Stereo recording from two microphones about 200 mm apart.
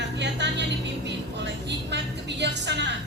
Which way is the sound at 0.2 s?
60° right (ahead or behind).